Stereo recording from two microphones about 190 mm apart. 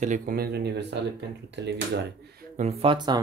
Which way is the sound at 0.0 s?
45° right (ahead or behind).